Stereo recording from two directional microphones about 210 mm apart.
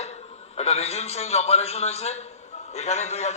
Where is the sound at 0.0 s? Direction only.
30° left (ahead or behind).